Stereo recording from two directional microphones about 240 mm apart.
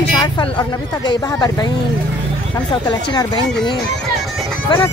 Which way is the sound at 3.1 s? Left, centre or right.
Centre.